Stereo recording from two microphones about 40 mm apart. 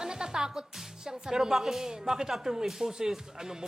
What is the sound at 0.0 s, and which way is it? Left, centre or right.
Speech, centre.